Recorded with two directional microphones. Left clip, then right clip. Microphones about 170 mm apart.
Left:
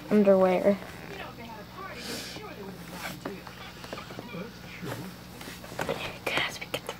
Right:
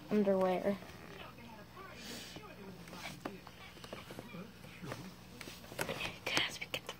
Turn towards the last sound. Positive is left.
turn(degrees=-10)  # may be behind; listen again after turning